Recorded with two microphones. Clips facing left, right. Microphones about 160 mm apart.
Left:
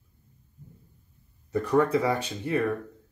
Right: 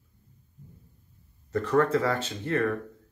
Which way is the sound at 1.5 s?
10° left (ahead or behind).